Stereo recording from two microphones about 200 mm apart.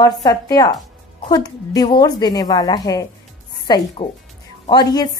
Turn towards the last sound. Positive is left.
turn(degrees=20)  # may be behind; listen again after turning